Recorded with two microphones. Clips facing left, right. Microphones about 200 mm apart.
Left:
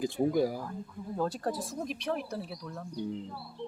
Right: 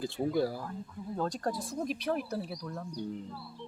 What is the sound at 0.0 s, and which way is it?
Speech, 15° left (ahead or behind).